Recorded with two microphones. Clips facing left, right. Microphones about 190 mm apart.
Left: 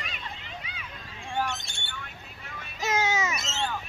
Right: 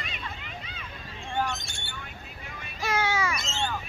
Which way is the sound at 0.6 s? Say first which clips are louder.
Even; 10° left (ahead or behind).